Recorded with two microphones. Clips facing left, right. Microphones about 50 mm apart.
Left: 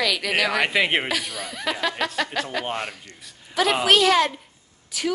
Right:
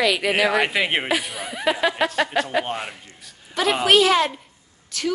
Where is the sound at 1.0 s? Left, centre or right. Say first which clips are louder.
Right 3 dB; centre.